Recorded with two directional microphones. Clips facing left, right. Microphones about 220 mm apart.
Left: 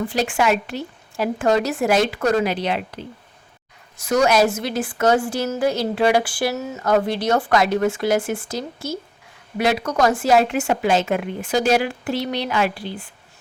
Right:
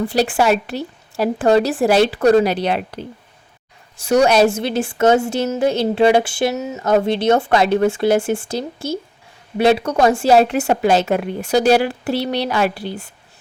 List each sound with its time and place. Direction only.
0.1 s a woman's voice: 35° right (ahead or behind)